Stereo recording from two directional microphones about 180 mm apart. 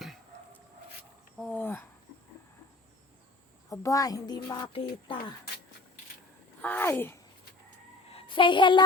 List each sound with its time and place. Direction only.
1.4 s speech: 5° left (ahead or behind)
3.7 s speech: 20° left (ahead or behind)
6.6 s speech: 10° left (ahead or behind)
8.1 s a woman's voice: 30° left (ahead or behind)